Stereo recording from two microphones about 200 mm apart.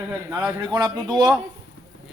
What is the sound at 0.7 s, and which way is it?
Speech, 20° right (ahead or behind).